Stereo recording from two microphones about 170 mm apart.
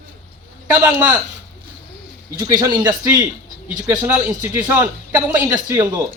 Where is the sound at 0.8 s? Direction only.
20° right (ahead or behind).